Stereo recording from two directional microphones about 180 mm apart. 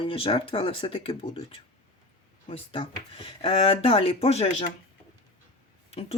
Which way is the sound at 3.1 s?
30° left (ahead or behind).